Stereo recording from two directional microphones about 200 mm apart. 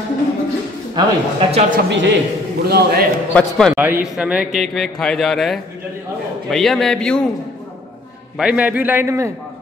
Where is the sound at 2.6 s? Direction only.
55° right (ahead or behind).